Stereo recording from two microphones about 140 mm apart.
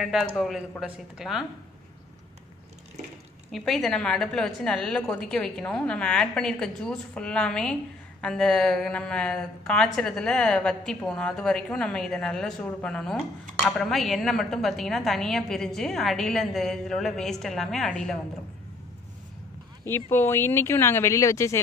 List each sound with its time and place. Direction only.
0.0 s a woman's voice: centre (ahead or behind)
3.5 s a woman's voice: centre (ahead or behind)
20.1 s speech: 15° left (ahead or behind)